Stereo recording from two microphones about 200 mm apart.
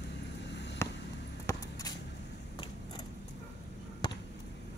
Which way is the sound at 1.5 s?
20° left (ahead or behind).